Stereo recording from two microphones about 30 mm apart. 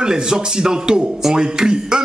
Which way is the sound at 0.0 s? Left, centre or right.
Right.